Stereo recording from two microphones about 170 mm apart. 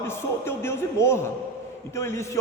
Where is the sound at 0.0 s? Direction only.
15° left (ahead or behind).